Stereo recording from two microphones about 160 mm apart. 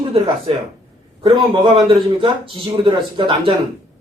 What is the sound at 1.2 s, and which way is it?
A man's voice, 35° right (ahead or behind).